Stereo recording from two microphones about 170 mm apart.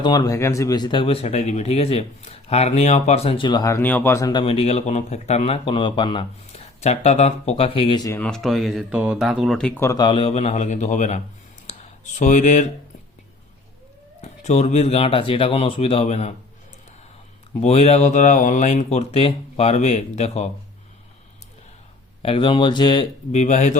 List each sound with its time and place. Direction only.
0.0 s speech: 25° left (ahead or behind)
4.3 s speech: 30° left (ahead or behind)
8.2 s speech: centre (ahead or behind)
10.0 s a man's voice: 30° left (ahead or behind); by 11.2 s 45° left (ahead or behind)
11.6 s a sound: 45° left (ahead or behind)
14.2 s speech: 40° left (ahead or behind)
17.6 s speech: 40° left (ahead or behind)
22.2 s speech: 30° left (ahead or behind)
23.3 s a man's voice: 40° left (ahead or behind)